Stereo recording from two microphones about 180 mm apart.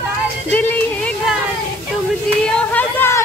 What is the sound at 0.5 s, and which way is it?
Music, 10° left (ahead or behind).